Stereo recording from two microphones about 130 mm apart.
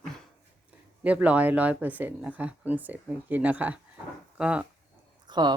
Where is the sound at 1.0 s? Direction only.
10° right (ahead or behind).